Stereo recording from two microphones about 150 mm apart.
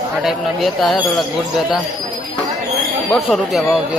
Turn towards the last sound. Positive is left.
turn(degrees=-5)  # may be behind; listen again after turning